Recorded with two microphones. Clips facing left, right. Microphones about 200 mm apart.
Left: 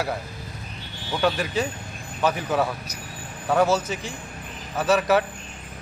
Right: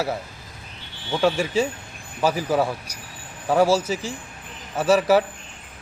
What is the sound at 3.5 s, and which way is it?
Speech, 10° right (ahead or behind).